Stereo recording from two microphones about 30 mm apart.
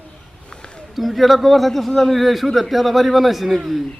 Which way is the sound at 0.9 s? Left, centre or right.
Centre.